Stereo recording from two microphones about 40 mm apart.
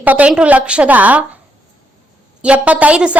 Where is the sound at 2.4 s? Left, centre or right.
Right.